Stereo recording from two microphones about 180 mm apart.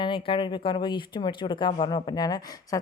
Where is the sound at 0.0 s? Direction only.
30° left (ahead or behind).